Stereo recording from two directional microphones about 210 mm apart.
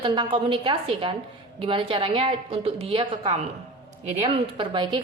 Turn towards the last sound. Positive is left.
turn(degrees=-25)  # may be behind; listen again after turning